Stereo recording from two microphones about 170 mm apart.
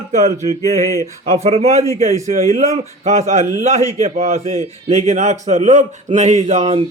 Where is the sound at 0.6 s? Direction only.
20° left (ahead or behind).